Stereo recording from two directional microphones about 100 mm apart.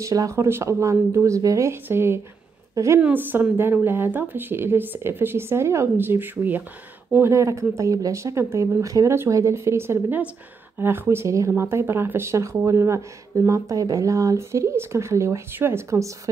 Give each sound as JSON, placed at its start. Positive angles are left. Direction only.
{"t": 0.0, "sound": "a woman's voice", "side_deg": -35}
{"t": 3.0, "sound": "speech", "side_deg": -20}